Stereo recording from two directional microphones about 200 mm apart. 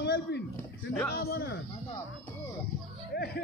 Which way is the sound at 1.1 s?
50° left (ahead or behind).